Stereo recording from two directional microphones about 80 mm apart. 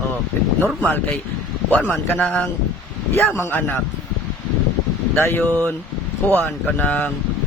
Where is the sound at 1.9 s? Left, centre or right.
Left.